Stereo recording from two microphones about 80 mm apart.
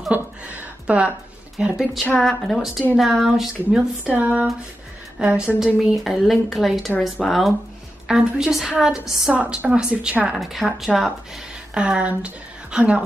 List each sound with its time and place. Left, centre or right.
0.1 s a sound: centre
1.6 s speech: centre
3.7 s a woman's voice: centre
5.8 s a woman's voice: centre
9.3 s a woman's voice: centre
10.3 s speech: centre
11.7 s a woman's voice: centre